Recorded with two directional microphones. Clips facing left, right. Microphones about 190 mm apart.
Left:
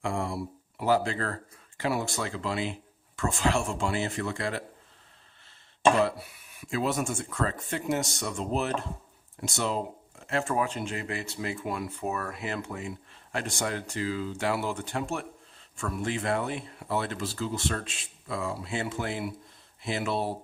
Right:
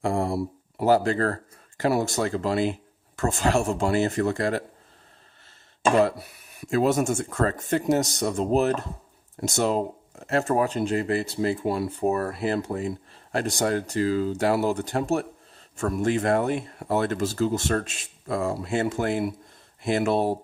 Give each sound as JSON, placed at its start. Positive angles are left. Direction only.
{"t": 0.0, "sound": "speech", "side_deg": -40}
{"t": 6.0, "sound": "speech", "side_deg": -45}